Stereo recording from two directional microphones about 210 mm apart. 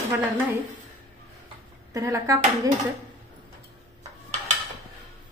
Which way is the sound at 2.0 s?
15° right (ahead or behind).